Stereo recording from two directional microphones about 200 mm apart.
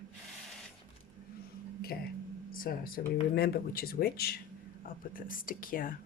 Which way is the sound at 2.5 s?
45° left (ahead or behind).